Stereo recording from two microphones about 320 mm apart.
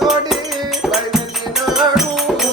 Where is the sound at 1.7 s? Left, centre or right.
Centre.